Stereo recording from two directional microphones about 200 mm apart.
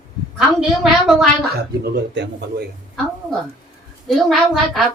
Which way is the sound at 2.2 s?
60° right (ahead or behind).